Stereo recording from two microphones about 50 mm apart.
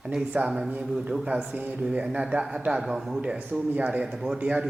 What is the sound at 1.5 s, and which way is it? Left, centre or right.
Speech, right.